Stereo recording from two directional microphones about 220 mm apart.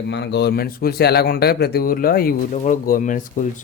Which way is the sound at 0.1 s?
50° left (ahead or behind).